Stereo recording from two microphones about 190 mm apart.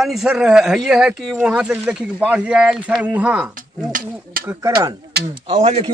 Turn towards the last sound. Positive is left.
turn(degrees=-35)  # may be behind; listen again after turning